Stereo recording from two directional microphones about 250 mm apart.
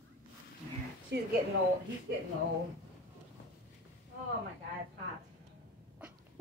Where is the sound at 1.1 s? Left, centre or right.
Right.